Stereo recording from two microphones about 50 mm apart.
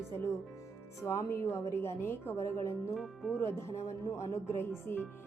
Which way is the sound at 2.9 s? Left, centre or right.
Centre.